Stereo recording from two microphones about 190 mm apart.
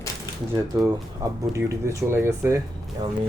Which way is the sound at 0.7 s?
15° right (ahead or behind).